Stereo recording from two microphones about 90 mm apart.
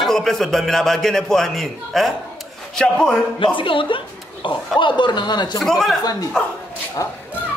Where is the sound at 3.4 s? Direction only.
70° left (ahead or behind).